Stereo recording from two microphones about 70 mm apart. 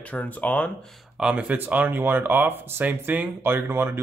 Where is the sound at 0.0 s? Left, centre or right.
Left.